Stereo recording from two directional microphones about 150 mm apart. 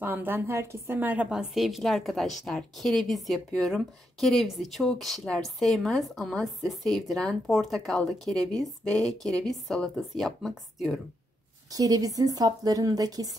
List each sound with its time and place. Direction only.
0.0 s speech: 15° right (ahead or behind)
11.7 s a woman's voice: 25° right (ahead or behind)